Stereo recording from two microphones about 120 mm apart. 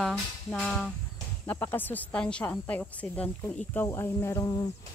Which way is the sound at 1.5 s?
15° left (ahead or behind).